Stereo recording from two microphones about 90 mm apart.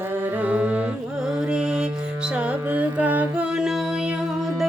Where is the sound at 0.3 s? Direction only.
15° right (ahead or behind).